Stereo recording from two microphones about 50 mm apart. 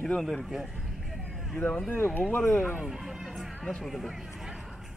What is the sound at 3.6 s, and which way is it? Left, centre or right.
Speech, centre.